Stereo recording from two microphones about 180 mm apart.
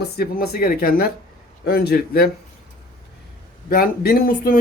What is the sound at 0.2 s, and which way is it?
Speech, 55° left (ahead or behind).